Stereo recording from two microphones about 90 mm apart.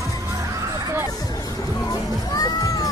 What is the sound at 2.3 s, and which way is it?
Music, 45° left (ahead or behind).